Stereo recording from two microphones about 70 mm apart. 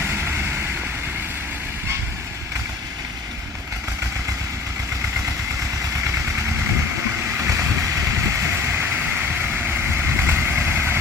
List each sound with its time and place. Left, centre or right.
0.0 s vehicle: right
7.3 s vehicle: right